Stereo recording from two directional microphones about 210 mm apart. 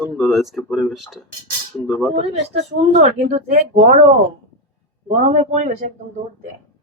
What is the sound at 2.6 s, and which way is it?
Speech, 30° right (ahead or behind).